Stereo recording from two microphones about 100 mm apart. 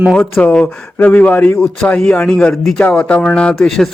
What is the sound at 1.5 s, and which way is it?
A man's voice, 5° left (ahead or behind).